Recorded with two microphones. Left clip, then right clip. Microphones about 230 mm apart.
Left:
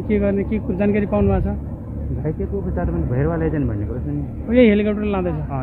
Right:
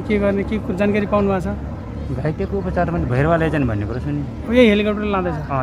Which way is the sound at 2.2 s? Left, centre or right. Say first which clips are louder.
Right 3 dB; right.